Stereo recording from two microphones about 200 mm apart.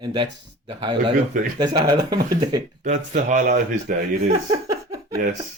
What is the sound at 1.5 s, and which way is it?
Speech, 20° right (ahead or behind).